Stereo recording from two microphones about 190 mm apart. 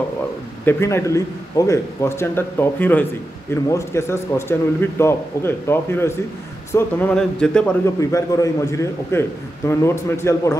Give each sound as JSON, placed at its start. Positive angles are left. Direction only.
{"t": 0.7, "sound": "a man's voice", "side_deg": 15}
{"t": 8.0, "sound": "a man's voice", "side_deg": 15}